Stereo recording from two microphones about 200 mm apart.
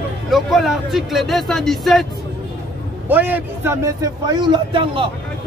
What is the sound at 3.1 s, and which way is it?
A man's voice, 10° right (ahead or behind).